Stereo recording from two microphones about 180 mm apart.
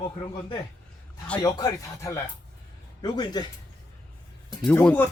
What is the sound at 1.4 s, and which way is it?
Speech, 15° left (ahead or behind).